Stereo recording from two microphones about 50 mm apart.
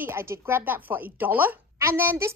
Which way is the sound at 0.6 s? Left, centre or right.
Right.